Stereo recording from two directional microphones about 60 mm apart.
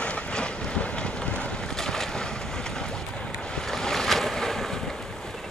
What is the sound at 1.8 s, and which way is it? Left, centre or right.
Boat, centre.